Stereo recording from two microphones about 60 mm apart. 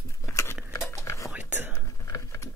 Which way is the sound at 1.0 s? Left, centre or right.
Left.